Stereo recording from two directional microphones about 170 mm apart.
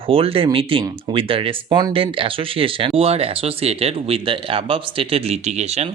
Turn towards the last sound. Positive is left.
turn(degrees=-40)  # may be behind; listen again after turning